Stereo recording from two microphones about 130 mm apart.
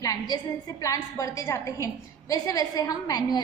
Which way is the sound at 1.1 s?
25° left (ahead or behind).